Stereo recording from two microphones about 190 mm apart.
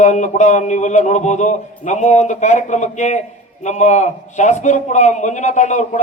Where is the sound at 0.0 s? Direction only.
40° left (ahead or behind).